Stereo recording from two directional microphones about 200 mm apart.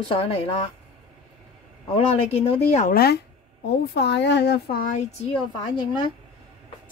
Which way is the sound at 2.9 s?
55° left (ahead or behind).